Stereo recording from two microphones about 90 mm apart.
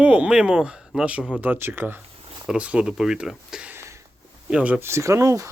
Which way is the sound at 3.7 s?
30° right (ahead or behind).